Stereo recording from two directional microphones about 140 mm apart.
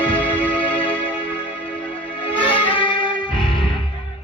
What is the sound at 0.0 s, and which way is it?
Music, 10° left (ahead or behind).